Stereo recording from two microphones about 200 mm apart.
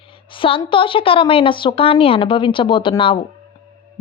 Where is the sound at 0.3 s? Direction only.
25° left (ahead or behind).